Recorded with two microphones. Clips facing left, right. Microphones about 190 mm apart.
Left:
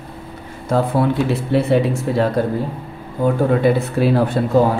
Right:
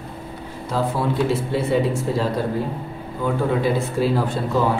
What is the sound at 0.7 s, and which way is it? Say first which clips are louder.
Speech: left 5 dB; 60° left (ahead or behind).